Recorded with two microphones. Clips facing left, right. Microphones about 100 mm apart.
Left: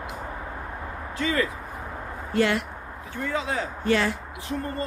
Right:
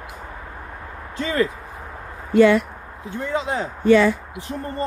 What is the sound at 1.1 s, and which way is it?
Speech, 30° right (ahead or behind).